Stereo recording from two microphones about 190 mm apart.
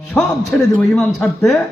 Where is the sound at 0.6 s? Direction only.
Centre (ahead or behind).